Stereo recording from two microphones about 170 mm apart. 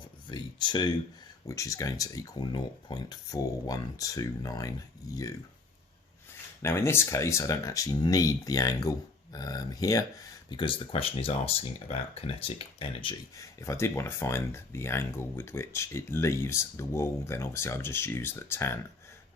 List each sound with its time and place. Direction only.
0.3 s speech: 25° left (ahead or behind)
6.6 s speech: 15° left (ahead or behind); by 13.1 s 30° left (ahead or behind)
13.3 s speech: 20° left (ahead or behind)